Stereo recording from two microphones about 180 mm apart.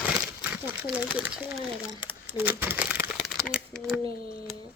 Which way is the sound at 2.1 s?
10° right (ahead or behind).